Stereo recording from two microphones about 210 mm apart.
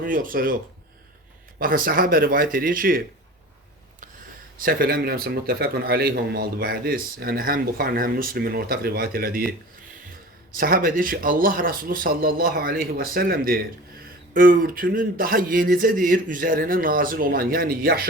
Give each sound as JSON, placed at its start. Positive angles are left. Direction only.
{"t": 0.0, "sound": "speech", "side_deg": -40}
{"t": 1.5, "sound": "a man's voice", "side_deg": -45}
{"t": 4.5, "sound": "a man's voice", "side_deg": -45}
{"t": 10.5, "sound": "a man's voice", "side_deg": -45}